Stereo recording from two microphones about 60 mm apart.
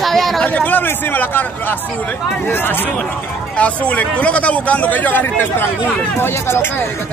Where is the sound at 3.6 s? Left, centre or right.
Left.